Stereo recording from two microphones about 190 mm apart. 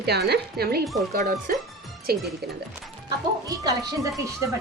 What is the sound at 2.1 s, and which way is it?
Speech, 55° right (ahead or behind).